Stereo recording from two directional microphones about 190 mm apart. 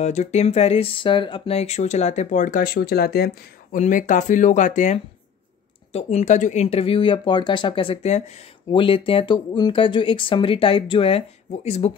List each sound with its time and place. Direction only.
0.0 s speech: 35° left (ahead or behind); by 3.3 s 55° left (ahead or behind)
3.7 s speech: 40° left (ahead or behind)